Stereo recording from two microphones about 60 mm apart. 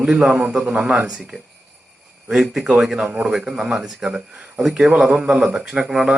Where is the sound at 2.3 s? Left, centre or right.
Centre.